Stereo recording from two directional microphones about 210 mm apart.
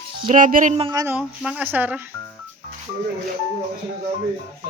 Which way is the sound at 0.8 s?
20° right (ahead or behind).